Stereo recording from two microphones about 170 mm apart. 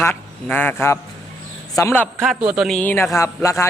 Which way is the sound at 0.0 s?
10° left (ahead or behind).